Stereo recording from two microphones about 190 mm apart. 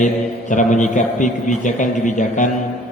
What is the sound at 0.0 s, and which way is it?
A man's voice, 40° left (ahead or behind).